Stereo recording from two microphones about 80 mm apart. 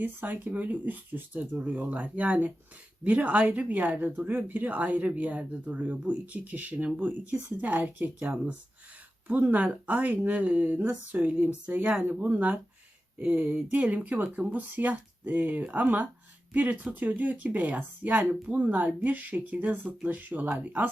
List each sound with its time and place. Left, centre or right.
0.0 s speech: right